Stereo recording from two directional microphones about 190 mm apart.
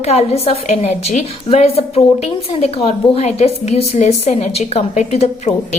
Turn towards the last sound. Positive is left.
turn(degrees=35)  # may be behind; listen again after turning